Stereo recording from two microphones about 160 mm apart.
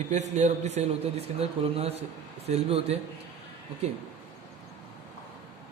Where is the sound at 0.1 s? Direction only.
45° right (ahead or behind).